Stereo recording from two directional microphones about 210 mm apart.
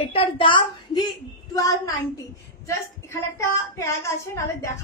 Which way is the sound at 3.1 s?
15° left (ahead or behind).